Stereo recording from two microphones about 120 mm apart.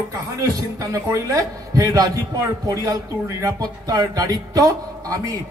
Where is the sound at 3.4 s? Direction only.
30° right (ahead or behind).